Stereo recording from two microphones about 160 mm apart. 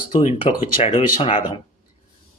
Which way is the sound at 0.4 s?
35° left (ahead or behind).